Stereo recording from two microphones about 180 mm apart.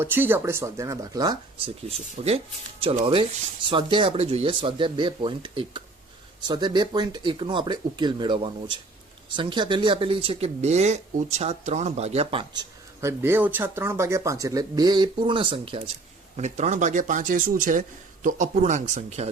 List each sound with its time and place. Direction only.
0.0 s speech: 10° right (ahead or behind); by 12.6 s 30° right (ahead or behind)
13.0 s speech: 15° right (ahead or behind); by 15.8 s 30° right (ahead or behind)
16.4 s speech: 40° right (ahead or behind)